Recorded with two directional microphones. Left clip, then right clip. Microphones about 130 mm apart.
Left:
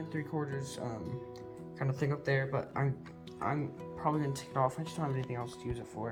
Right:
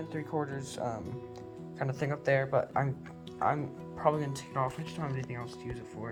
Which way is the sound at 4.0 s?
30° right (ahead or behind).